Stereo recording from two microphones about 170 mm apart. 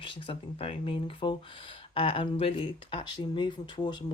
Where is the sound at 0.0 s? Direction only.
30° left (ahead or behind).